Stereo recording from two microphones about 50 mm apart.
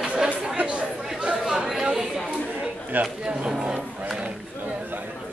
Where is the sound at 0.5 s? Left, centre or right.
Right.